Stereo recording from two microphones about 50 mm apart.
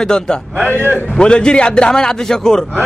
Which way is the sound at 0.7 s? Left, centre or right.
Right.